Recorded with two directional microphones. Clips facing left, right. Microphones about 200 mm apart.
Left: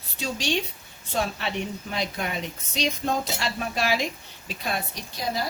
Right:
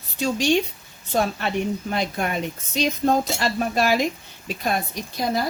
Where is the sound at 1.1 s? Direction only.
45° right (ahead or behind).